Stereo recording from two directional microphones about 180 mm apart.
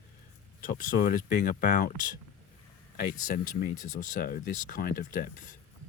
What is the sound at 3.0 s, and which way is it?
Speech, 55° left (ahead or behind).